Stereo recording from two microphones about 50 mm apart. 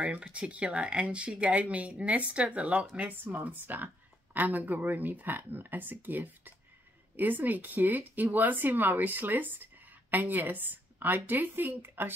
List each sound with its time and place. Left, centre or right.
0.3 s speech: right
3.6 s speech: right